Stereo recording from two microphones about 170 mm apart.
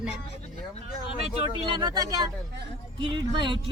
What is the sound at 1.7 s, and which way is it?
Speech, 25° right (ahead or behind).